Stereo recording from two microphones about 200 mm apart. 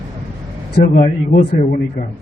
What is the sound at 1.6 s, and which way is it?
Speech, 35° left (ahead or behind).